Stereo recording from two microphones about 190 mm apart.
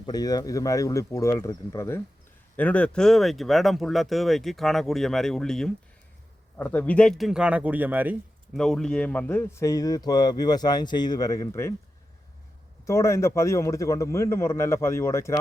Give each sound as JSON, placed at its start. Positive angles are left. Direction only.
{"t": 0.0, "sound": "a man's voice", "side_deg": 20}
{"t": 8.5, "sound": "a man's voice", "side_deg": 0}
{"t": 12.8, "sound": "a man's voice", "side_deg": 15}